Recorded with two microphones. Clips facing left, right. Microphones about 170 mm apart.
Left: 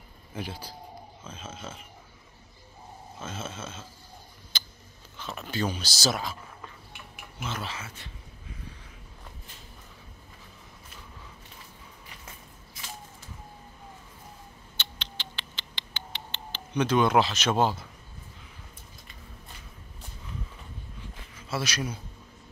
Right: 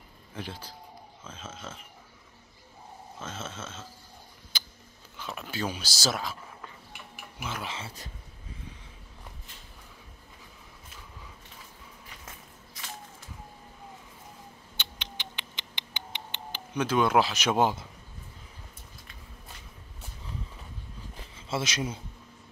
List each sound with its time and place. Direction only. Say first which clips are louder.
1.2 s speech: left 1 dB; centre (ahead or behind)
3.2 s speech: left 2 dB; centre (ahead or behind)
4.5 s a sound: left 1 dB; 10° right (ahead or behind)
5.1 s speech: left 2 dB; 10° right (ahead or behind)
7.3 s speech: left 1 dB; 10° right (ahead or behind)
7.7 s speech: right 1 dB; 35° right (ahead or behind)
14.8 s mouse: even; 15° right (ahead or behind)
16.7 s speech: left 2 dB; 5° right (ahead or behind)
21.4 s speech: even; 25° right (ahead or behind)